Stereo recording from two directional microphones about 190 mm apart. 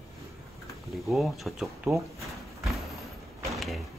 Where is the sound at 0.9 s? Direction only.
Centre (ahead or behind).